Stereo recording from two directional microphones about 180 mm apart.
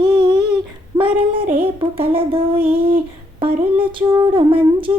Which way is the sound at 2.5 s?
10° right (ahead or behind).